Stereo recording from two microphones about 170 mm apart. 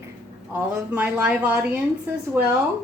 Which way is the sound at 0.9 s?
10° right (ahead or behind).